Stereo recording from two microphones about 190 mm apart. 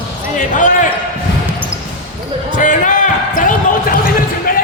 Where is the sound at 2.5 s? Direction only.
40° left (ahead or behind).